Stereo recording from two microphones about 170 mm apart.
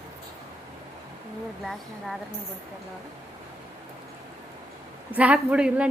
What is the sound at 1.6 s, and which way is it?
Speech, centre (ahead or behind).